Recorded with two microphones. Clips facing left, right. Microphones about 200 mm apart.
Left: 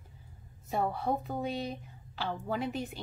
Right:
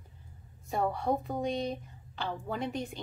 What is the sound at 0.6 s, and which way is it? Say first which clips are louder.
Speech: right 1 dB; centre (ahead or behind).